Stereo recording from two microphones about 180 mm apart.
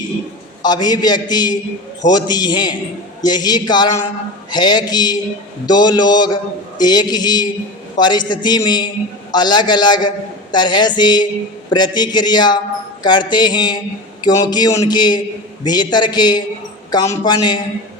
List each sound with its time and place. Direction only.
0.6 s a man's voice: 25° left (ahead or behind)